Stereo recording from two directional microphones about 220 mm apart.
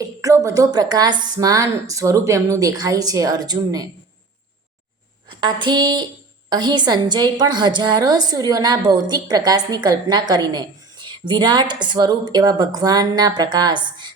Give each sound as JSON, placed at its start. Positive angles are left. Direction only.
{"t": 0.0, "sound": "a woman's voice", "side_deg": -15}
{"t": 5.4, "sound": "a woman's voice", "side_deg": -20}